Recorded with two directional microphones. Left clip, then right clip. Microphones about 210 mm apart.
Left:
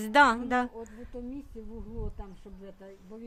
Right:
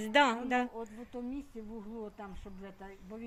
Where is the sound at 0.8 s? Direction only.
5° right (ahead or behind).